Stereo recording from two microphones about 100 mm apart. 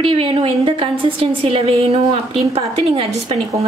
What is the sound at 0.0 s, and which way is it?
A woman's voice, 65° right (ahead or behind).